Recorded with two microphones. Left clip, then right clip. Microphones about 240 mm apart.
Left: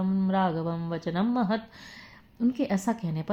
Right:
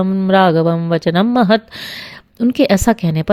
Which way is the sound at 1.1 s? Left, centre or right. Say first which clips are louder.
Right 15 dB; right.